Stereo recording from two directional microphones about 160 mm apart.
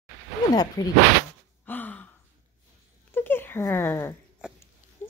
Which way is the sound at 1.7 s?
10° left (ahead or behind).